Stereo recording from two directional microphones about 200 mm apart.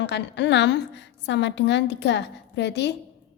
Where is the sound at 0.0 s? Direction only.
60° left (ahead or behind).